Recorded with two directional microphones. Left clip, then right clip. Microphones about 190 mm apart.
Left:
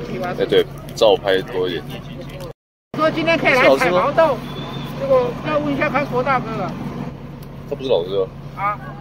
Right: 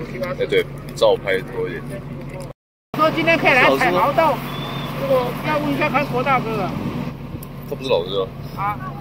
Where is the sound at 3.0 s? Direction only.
15° left (ahead or behind).